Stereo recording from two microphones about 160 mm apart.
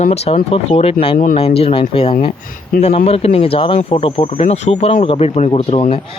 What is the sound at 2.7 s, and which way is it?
Speech, 65° left (ahead or behind).